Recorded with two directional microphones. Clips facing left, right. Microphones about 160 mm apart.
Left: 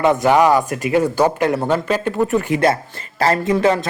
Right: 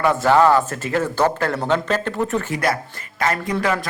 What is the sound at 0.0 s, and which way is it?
Speech, 15° left (ahead or behind).